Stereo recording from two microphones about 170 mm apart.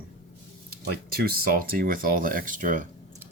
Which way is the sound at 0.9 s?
60° right (ahead or behind).